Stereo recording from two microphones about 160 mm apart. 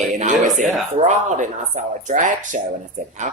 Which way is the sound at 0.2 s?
50° right (ahead or behind).